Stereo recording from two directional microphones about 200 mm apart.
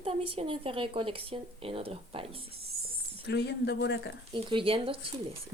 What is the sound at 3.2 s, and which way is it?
Speech, 60° left (ahead or behind).